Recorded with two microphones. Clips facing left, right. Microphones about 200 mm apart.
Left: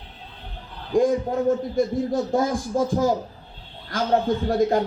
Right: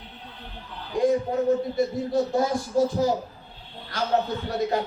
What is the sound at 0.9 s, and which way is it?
A man's voice, 45° left (ahead or behind).